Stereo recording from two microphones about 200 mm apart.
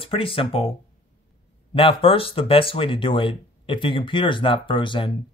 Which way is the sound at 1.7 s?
25° left (ahead or behind).